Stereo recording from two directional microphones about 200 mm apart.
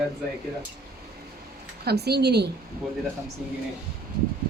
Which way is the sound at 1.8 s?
55° right (ahead or behind).